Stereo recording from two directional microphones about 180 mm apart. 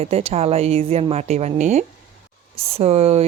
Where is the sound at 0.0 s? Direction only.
35° right (ahead or behind).